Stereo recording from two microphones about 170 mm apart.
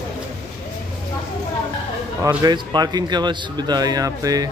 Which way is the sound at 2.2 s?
25° right (ahead or behind).